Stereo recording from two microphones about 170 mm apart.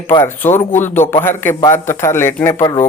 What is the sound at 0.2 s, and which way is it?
Speech, 15° left (ahead or behind).